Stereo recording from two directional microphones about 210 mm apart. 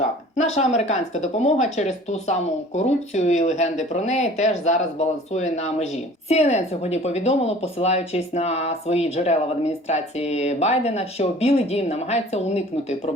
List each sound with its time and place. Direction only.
0.3 s speech: 30° left (ahead or behind)